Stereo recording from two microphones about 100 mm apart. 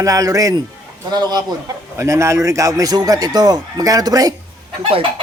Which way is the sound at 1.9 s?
30° right (ahead or behind).